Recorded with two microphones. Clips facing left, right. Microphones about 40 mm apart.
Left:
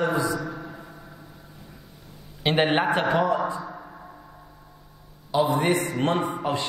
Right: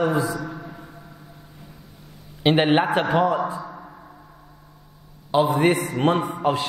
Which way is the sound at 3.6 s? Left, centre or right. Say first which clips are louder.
Even; centre.